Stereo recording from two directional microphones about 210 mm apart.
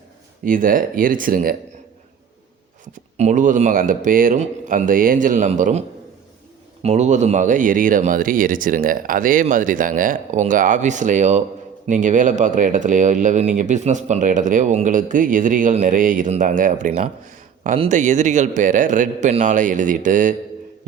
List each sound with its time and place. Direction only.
0.4 s speech: 40° right (ahead or behind)
3.2 s speech: 35° right (ahead or behind)
6.8 s speech: 30° right (ahead or behind)